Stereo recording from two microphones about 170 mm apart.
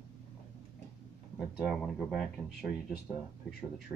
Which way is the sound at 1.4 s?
Centre (ahead or behind).